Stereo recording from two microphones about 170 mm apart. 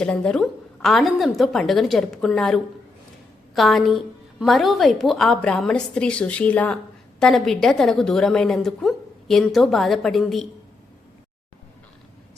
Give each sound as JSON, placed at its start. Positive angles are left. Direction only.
{"t": 0.0, "sound": "a woman's voice", "side_deg": 5}